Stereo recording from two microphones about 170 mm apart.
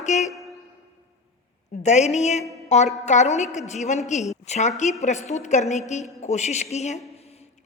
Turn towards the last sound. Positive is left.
turn(degrees=40)  # may be behind; listen again after turning